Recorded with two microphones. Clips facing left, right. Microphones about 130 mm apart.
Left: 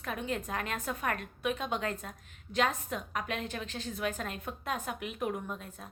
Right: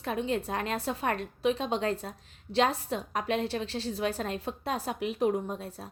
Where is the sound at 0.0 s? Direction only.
30° right (ahead or behind).